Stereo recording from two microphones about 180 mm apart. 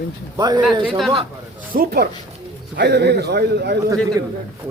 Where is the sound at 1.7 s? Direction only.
60° right (ahead or behind).